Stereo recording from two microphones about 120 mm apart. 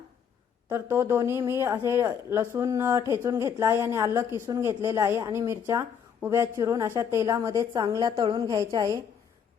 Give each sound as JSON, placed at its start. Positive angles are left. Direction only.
{"t": 0.7, "sound": "a woman's voice", "side_deg": -20}